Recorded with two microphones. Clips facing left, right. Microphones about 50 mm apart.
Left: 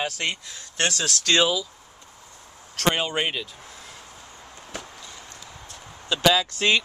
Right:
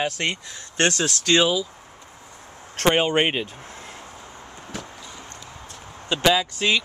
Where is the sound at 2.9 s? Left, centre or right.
Right.